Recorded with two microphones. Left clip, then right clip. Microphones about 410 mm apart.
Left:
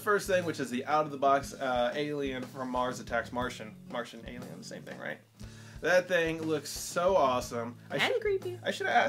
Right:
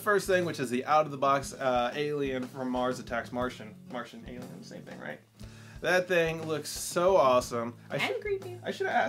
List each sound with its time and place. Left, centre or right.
0.0 s speech: right; by 4.1 s centre
5.8 s speech: right
8.6 s speech: centre